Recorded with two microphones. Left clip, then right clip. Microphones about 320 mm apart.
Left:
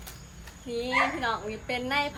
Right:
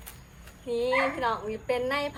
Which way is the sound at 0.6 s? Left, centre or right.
Centre.